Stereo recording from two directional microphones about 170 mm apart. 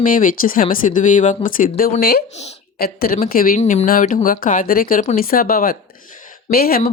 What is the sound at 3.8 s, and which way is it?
Speech, 55° left (ahead or behind).